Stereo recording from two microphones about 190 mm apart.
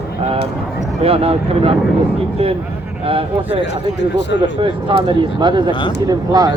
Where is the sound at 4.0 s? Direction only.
65° left (ahead or behind).